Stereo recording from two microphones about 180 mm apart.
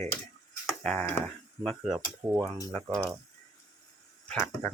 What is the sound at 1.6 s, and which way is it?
Speech, 5° right (ahead or behind).